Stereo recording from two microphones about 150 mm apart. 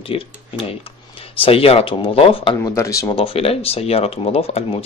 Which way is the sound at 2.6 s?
20° left (ahead or behind).